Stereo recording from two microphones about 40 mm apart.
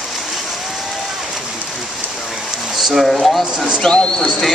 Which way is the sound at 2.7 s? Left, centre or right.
Centre.